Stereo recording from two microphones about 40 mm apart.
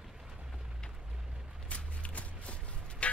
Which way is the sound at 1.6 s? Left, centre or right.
Left.